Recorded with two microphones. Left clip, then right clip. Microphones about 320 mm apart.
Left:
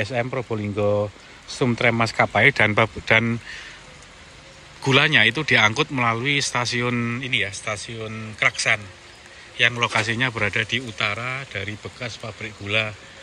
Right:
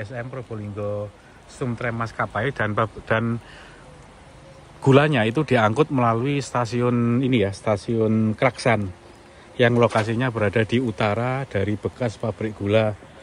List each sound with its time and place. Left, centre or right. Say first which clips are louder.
0.0 s speech: left 8 dB; centre
4.8 s speech: left 1 dB; centre